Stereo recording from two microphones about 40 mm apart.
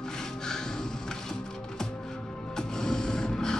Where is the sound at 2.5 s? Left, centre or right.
Centre.